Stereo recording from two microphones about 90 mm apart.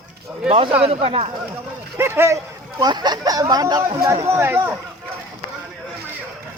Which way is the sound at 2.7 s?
50° right (ahead or behind).